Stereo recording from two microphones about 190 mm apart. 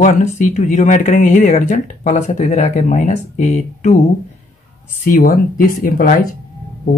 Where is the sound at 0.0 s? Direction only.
40° left (ahead or behind).